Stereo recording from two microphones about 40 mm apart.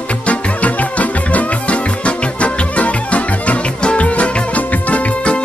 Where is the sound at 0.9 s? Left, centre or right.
Left.